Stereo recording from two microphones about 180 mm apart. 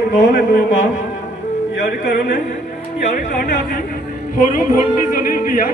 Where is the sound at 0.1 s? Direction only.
45° left (ahead or behind).